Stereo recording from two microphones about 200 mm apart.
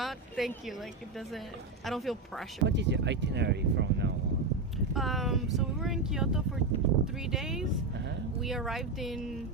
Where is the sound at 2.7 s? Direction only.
60° right (ahead or behind).